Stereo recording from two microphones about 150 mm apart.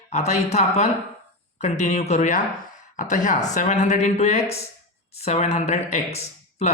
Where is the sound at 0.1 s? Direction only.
50° left (ahead or behind).